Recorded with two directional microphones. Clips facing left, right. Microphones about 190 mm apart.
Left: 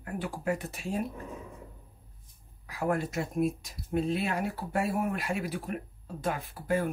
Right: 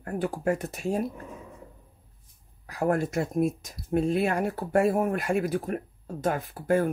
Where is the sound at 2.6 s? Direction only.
45° right (ahead or behind).